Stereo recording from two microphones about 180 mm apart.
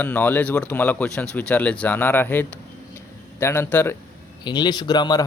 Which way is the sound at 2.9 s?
15° left (ahead or behind).